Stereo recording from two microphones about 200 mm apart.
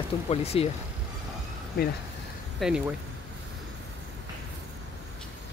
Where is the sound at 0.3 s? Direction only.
30° left (ahead or behind).